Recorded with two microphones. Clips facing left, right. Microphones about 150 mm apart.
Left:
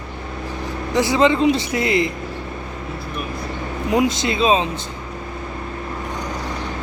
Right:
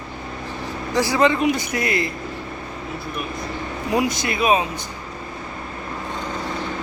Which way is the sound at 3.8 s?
20° left (ahead or behind).